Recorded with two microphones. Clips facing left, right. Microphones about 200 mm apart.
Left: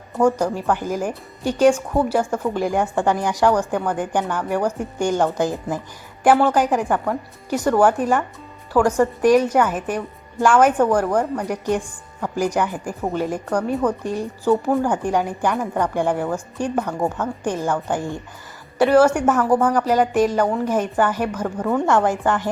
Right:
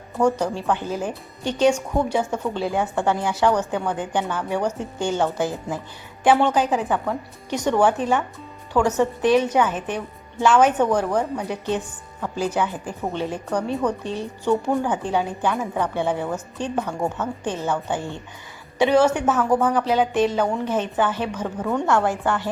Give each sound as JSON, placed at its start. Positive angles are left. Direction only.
{"t": 0.2, "sound": "speech", "side_deg": 10}
{"t": 6.8, "sound": "speech", "side_deg": 0}
{"t": 15.0, "sound": "speech", "side_deg": 10}
{"t": 15.5, "sound": "speech", "side_deg": 0}
{"t": 21.8, "sound": "speech", "side_deg": 15}